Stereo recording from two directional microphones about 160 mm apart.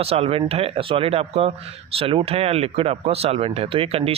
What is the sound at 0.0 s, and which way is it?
A man's voice, 40° right (ahead or behind).